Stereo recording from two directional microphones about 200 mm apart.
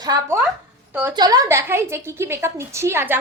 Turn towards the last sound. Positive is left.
turn(degrees=-10)  # may be behind; listen again after turning